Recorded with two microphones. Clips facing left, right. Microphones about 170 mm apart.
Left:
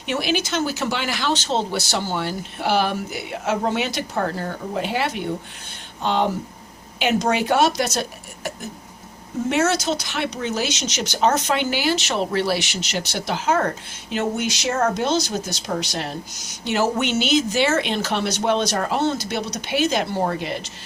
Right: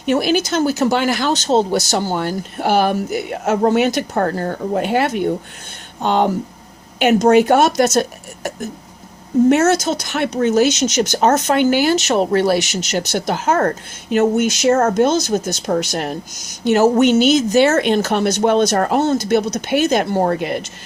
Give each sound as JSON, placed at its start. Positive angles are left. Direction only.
{"t": 0.0, "sound": "speech", "side_deg": -45}
{"t": 9.5, "sound": "speech", "side_deg": -45}